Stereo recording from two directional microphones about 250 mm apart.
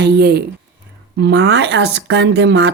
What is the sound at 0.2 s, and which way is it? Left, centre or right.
A woman's voice, right.